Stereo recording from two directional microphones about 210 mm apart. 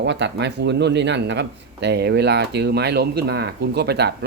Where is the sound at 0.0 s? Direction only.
55° right (ahead or behind).